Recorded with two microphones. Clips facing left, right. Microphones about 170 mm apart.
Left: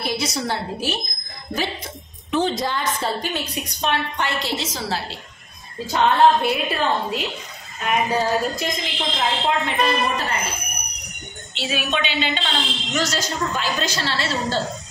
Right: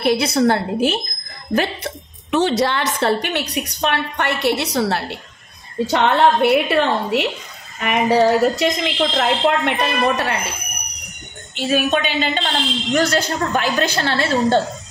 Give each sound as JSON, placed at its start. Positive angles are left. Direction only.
{"t": 0.0, "sound": "a woman's voice", "side_deg": -60}
{"t": 2.3, "sound": "a woman's voice", "side_deg": -75}
{"t": 11.5, "sound": "a woman's voice", "side_deg": -45}